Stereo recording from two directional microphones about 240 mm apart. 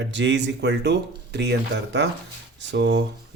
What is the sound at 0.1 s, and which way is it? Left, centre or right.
Speech, right.